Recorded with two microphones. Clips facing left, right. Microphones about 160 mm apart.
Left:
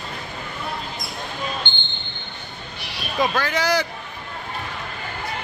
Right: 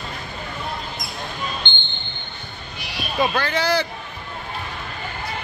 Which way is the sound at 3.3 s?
10° left (ahead or behind).